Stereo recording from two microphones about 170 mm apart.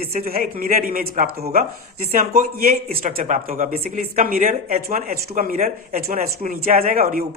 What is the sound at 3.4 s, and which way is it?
Speech, 55° right (ahead or behind).